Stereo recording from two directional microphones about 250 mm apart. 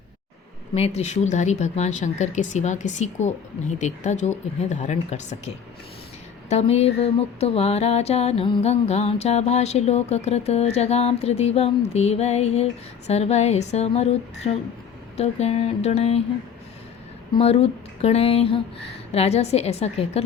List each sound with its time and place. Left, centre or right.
0.7 s mantra: left
6.5 s mantra: left
17.3 s mantra: left